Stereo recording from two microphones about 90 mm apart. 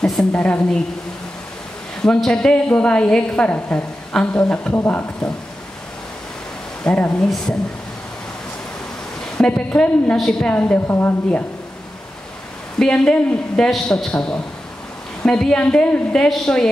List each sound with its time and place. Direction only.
0.0 s a woman's voice: 5° left (ahead or behind)
2.0 s a woman's voice: 5° left (ahead or behind)
6.8 s a woman's voice: 15° left (ahead or behind)
9.5 s a woman's voice: 15° left (ahead or behind)
10.1 s a woman's voice: 5° left (ahead or behind)
10.5 s a woman's voice: 15° left (ahead or behind)
12.7 s a woman's voice: 10° left (ahead or behind)